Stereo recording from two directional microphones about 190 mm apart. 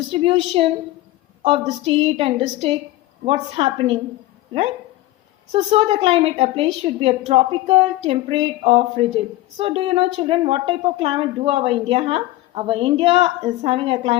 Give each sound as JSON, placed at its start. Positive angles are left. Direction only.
{"t": 0.1, "sound": "a woman's voice", "side_deg": -30}
{"t": 5.5, "sound": "a woman's voice", "side_deg": -30}